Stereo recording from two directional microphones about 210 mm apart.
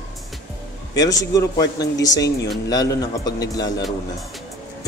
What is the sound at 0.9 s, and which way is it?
A man's voice, 15° left (ahead or behind).